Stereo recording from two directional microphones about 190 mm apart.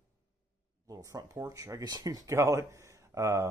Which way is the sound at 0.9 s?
20° right (ahead or behind).